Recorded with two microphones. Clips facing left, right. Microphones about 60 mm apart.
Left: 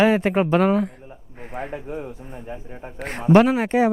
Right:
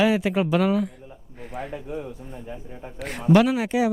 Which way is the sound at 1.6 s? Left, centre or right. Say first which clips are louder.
Left 2 dB; left.